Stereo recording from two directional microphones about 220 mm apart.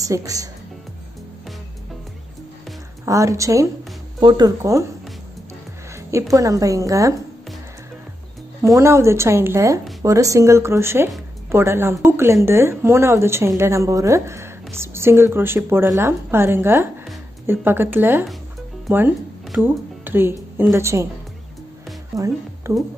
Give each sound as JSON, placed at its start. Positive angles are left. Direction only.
{"t": 0.0, "sound": "speech", "side_deg": -15}
{"t": 3.1, "sound": "speech", "side_deg": -15}
{"t": 5.9, "sound": "speech", "side_deg": -15}
{"t": 8.6, "sound": "speech", "side_deg": -10}
{"t": 22.1, "sound": "a woman's voice", "side_deg": -15}